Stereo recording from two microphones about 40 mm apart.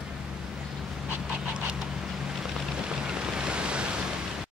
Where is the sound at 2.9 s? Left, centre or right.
Right.